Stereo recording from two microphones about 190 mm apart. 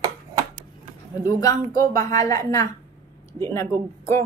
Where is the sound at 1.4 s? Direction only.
20° left (ahead or behind).